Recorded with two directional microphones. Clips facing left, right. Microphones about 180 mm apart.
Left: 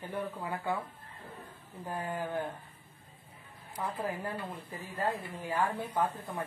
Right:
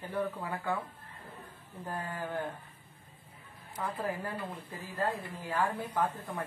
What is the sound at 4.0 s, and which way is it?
Speech, 10° left (ahead or behind).